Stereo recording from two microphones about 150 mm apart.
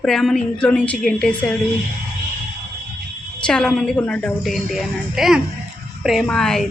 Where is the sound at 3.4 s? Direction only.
5° left (ahead or behind).